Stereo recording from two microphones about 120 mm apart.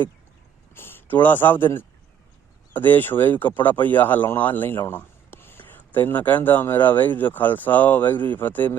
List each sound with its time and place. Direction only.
0.7 s speech: 20° left (ahead or behind)